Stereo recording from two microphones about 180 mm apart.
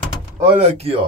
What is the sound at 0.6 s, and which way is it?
Speech, 35° right (ahead or behind).